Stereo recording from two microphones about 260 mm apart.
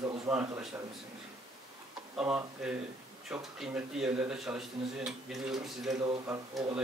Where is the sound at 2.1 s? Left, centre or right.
Centre.